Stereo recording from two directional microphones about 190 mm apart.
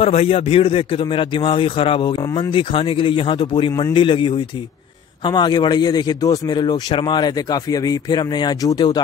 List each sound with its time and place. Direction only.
0.0 s a man's voice: 30° left (ahead or behind)